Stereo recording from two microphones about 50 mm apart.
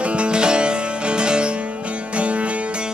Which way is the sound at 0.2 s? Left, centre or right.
Centre.